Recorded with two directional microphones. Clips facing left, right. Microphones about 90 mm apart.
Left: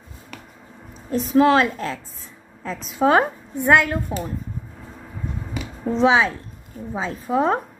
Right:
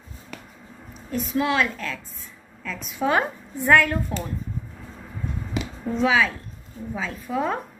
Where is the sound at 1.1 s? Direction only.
35° left (ahead or behind).